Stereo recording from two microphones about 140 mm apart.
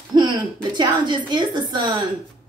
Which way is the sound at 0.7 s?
30° right (ahead or behind).